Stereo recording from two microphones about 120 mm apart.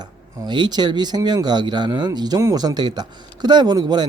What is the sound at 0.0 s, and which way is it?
Speech, 35° right (ahead or behind).